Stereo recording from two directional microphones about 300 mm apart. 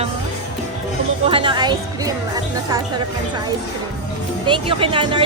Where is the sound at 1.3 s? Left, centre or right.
Centre.